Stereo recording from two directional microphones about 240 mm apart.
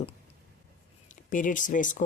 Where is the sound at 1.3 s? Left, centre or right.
Left.